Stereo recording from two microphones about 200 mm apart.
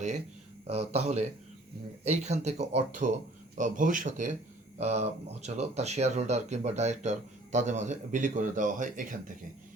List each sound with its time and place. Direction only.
0.7 s speech: 35° right (ahead or behind)